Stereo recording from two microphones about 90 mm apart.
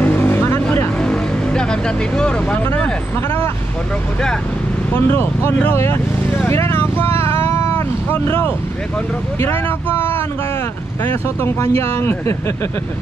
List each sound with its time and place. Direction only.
0.0 s vehicle: 20° left (ahead or behind)
0.9 s vehicle: 10° left (ahead or behind)
4.9 s speech: 25° left (ahead or behind)
7.2 s vehicle: 25° left (ahead or behind)
9.4 s speech: 25° left (ahead or behind)